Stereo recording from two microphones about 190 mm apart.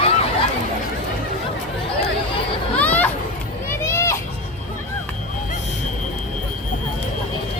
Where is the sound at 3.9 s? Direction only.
15° left (ahead or behind).